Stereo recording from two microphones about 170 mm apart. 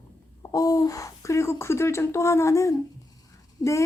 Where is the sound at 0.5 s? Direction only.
20° left (ahead or behind).